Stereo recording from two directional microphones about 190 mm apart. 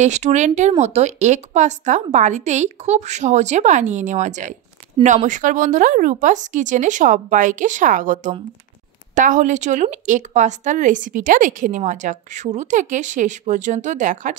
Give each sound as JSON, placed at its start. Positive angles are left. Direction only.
{"t": 0.0, "sound": "a woman's voice", "side_deg": -40}